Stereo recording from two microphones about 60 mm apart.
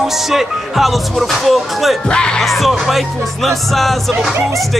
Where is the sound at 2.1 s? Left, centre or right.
Centre.